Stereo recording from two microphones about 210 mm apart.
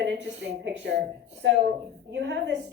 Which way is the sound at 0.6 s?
60° right (ahead or behind).